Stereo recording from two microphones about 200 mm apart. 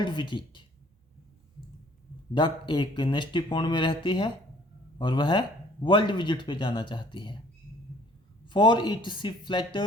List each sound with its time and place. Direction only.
0.0 s speech: 25° left (ahead or behind)
2.3 s speech: 25° left (ahead or behind)
8.4 s speech: 25° left (ahead or behind)